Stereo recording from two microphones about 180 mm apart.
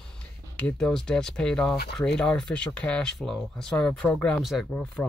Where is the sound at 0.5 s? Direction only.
5° left (ahead or behind).